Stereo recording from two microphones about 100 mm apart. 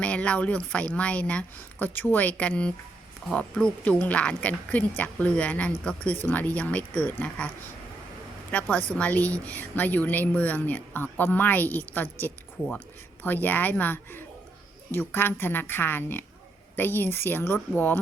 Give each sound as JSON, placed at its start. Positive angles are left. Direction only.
{"t": 0.0, "sound": "speech", "side_deg": 10}
{"t": 8.7, "sound": "a woman's voice", "side_deg": 15}